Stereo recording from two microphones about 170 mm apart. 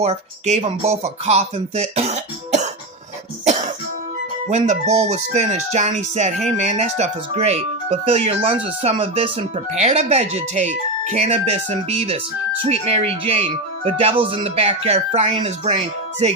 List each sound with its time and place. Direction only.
0.0 s music: 40° right (ahead or behind)